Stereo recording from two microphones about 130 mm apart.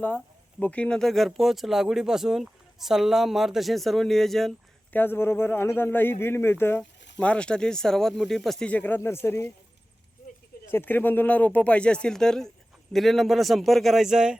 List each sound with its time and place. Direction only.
0.6 s speech: 10° left (ahead or behind)
4.9 s a man's voice: 15° left (ahead or behind)
10.7 s a man's voice: 15° left (ahead or behind); by 14.3 s 5° right (ahead or behind)